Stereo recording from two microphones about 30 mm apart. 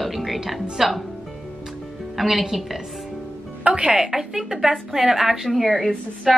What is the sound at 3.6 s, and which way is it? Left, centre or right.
Speech, right.